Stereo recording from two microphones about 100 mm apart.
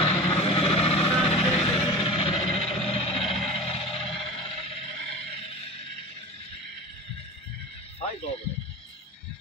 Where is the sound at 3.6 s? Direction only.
65° left (ahead or behind).